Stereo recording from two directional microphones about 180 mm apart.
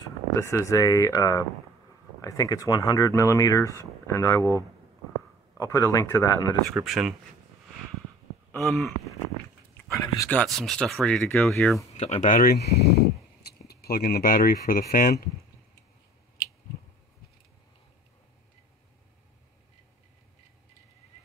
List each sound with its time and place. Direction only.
0.4 s speech: 15° left (ahead or behind)
5.6 s speech: 15° left (ahead or behind)
6.8 s speech: centre (ahead or behind)
8.5 s a sound: centre (ahead or behind)
9.8 s a sound: 15° left (ahead or behind)
10.4 s speech: centre (ahead or behind)
12.0 s speech: 40° left (ahead or behind)